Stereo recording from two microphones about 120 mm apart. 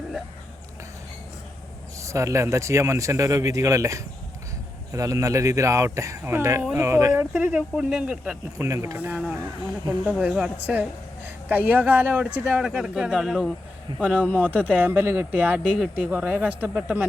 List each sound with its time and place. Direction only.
2.0 s a man's voice: 25° right (ahead or behind)
7.3 s speech: 10° right (ahead or behind)
8.5 s a man's voice: 25° right (ahead or behind)
9.0 s speech: 15° right (ahead or behind)
14.3 s speech: 15° right (ahead or behind)